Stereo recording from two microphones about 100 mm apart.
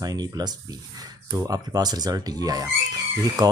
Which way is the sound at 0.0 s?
40° right (ahead or behind).